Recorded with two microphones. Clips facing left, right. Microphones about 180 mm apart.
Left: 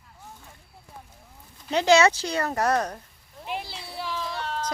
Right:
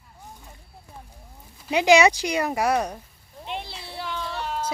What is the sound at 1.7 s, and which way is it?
Speech, 10° right (ahead or behind).